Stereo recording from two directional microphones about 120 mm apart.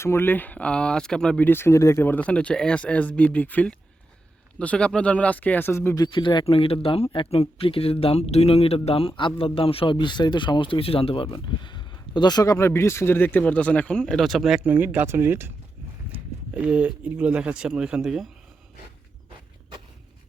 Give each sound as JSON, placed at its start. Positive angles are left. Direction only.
{"t": 0.0, "sound": "speech", "side_deg": 20}
{"t": 1.5, "sound": "speech", "side_deg": 20}
{"t": 6.1, "sound": "speech", "side_deg": 40}
{"t": 14.6, "sound": "speech", "side_deg": -15}